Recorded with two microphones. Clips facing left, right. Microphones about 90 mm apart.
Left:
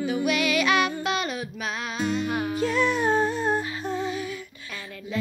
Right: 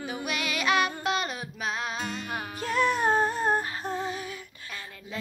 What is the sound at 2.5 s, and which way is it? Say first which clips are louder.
Humming: even; 45° right (ahead or behind).